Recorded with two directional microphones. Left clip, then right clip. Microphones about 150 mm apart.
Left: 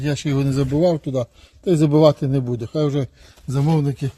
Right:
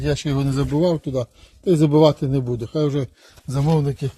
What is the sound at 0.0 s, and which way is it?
Speech, 55° left (ahead or behind).